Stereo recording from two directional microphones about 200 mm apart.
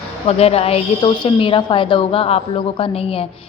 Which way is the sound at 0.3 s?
30° left (ahead or behind).